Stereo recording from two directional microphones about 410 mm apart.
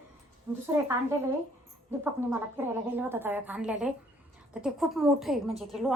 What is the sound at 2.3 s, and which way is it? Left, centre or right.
A woman's voice, centre.